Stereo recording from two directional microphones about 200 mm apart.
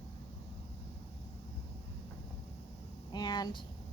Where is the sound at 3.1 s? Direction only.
20° left (ahead or behind).